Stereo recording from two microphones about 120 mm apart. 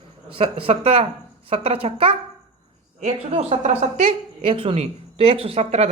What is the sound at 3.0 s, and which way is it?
Speech, 65° right (ahead or behind).